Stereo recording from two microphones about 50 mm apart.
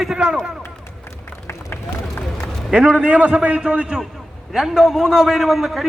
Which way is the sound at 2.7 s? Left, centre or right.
Centre.